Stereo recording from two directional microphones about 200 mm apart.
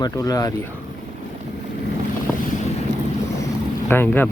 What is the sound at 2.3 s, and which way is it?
Boat, 5° left (ahead or behind).